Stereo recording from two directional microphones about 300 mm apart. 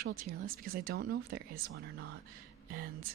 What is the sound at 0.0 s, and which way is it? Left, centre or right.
Speech, right.